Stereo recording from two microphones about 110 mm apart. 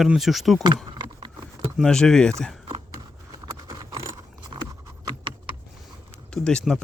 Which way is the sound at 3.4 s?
35° right (ahead or behind).